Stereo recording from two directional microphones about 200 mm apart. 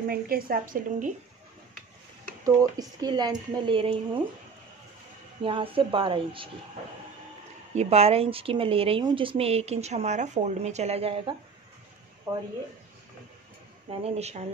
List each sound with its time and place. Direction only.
0.0 s a woman's voice: 50° right (ahead or behind)
2.4 s a woman's voice: 20° right (ahead or behind)
5.4 s a woman's voice: 25° right (ahead or behind)
7.7 s speech: 30° right (ahead or behind)
12.3 s speech: 15° right (ahead or behind)
13.8 s speech: 30° right (ahead or behind)